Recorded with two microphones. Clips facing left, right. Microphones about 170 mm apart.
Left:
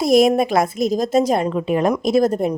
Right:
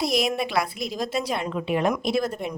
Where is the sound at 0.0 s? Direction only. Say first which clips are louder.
Left 10 dB; 50° left (ahead or behind).